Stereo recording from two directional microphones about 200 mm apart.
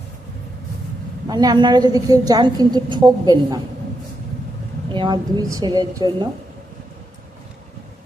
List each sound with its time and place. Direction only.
1.3 s a woman's voice: 20° right (ahead or behind)
4.9 s a woman's voice: 25° right (ahead or behind)